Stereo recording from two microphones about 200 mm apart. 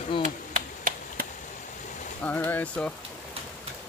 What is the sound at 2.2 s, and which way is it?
Speech, 10° left (ahead or behind).